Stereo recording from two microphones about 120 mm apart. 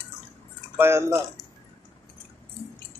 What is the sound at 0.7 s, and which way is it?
Speech, 20° right (ahead or behind).